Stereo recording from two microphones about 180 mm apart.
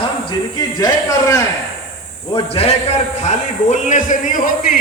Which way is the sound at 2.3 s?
30° left (ahead or behind).